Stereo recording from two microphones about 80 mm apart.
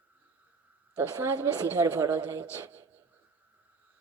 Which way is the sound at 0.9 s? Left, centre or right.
Right.